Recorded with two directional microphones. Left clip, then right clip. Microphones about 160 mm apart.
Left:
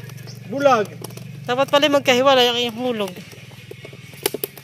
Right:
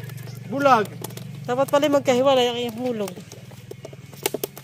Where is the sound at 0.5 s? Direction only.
10° right (ahead or behind); by 3.1 s 5° left (ahead or behind).